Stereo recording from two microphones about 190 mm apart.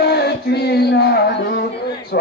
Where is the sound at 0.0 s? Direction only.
60° left (ahead or behind).